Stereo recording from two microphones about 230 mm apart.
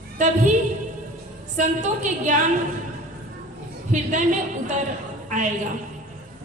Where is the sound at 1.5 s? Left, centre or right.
Right.